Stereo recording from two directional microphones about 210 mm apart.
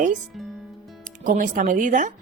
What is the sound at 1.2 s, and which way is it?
Speech, 40° right (ahead or behind).